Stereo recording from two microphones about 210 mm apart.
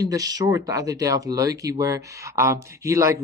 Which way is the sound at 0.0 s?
15° right (ahead or behind).